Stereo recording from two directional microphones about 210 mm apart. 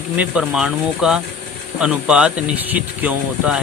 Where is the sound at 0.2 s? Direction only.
5° right (ahead or behind).